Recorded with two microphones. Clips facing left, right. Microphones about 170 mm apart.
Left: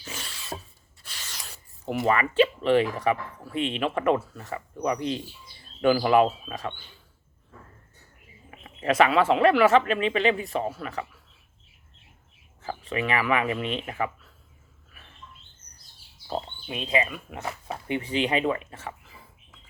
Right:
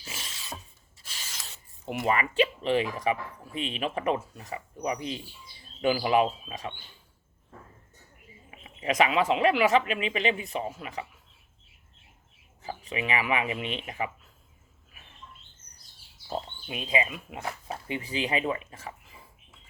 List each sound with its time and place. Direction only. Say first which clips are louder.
0.0 s filing: left 3 dB; 35° left (ahead or behind)
1.0 s rub: left 2 dB; 40° left (ahead or behind)
2.0 s speech: left 4 dB; 40° left (ahead or behind)
4.9 s speech: left 6 dB; 5° right (ahead or behind)
5.8 s speech: left 4 dB; 45° left (ahead or behind)
8.8 s speech: left 4 dB; 40° left (ahead or behind)
12.6 s speech: left 4 dB; 40° left (ahead or behind)
16.3 s speech: left 2 dB; 30° left (ahead or behind)
16.9 s speech: left 2 dB; 20° right (ahead or behind)
17.7 s speech: left 8 dB; 30° left (ahead or behind)